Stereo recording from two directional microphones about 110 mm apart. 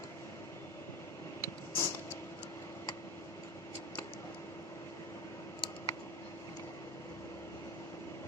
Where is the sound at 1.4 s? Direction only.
25° left (ahead or behind).